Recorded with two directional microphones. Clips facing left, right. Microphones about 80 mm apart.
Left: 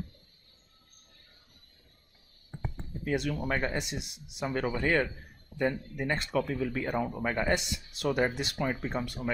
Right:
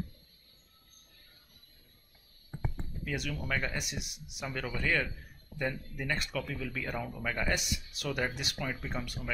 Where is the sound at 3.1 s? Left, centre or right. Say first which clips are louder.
Left 6 dB; left.